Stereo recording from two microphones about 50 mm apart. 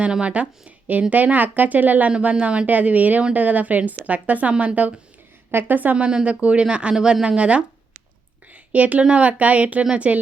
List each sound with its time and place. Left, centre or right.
0.0 s a woman's voice: right
2.3 s a woman's voice: right
5.5 s a woman's voice: right
6.1 s a woman's voice: right